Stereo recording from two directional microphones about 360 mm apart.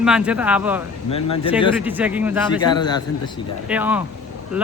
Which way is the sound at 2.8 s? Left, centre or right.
Centre.